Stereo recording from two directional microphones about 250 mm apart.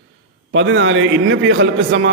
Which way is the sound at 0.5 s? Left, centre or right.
Right.